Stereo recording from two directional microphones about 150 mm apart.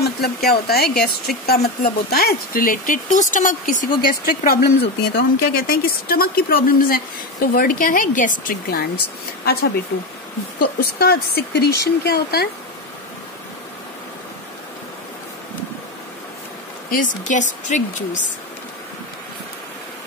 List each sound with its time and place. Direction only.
0.0 s speech: 90° left; by 8.8 s 70° left (ahead or behind)
9.4 s speech: 90° left
10.8 s speech: 90° left
16.9 s speech: 60° left (ahead or behind)